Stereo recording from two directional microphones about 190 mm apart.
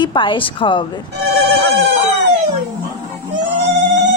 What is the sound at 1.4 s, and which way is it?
Speech, 60° right (ahead or behind).